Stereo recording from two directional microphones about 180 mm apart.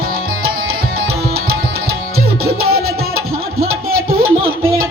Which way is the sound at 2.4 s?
60° right (ahead or behind).